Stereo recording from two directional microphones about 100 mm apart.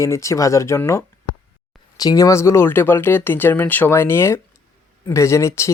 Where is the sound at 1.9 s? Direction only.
35° left (ahead or behind).